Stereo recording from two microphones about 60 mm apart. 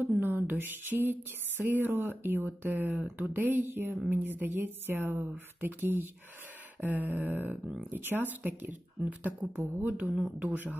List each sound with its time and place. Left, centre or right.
0.2 s speech: right
9.6 s speech: right
10.4 s speech: right